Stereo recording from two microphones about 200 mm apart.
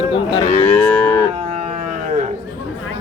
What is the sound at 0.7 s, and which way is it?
Moo, 5° left (ahead or behind).